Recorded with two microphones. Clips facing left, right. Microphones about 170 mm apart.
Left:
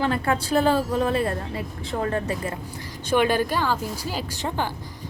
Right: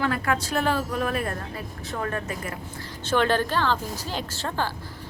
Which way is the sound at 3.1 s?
10° left (ahead or behind).